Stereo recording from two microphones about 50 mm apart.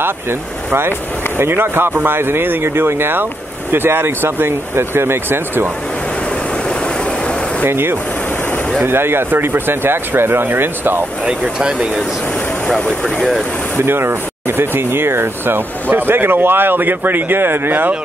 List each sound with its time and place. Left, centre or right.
0.0 s speech: right
7.6 s speech: right
11.2 s speech: centre
12.6 s speech: centre
13.7 s speech: right